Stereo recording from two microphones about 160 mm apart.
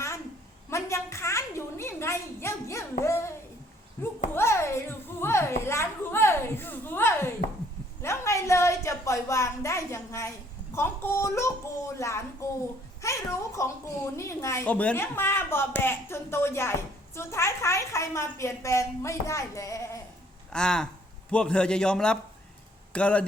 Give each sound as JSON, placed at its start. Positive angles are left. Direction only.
{"t": 0.7, "sound": "a sound", "side_deg": 20}
{"t": 11.9, "sound": "a child's voice", "side_deg": 20}
{"t": 20.5, "sound": "a man's voice", "side_deg": 5}